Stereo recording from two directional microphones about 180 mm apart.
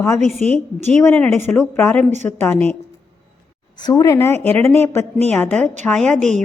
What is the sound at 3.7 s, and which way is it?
A woman's voice, 20° left (ahead or behind).